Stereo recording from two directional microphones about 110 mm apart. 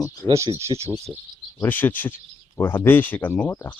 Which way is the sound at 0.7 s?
50° right (ahead or behind).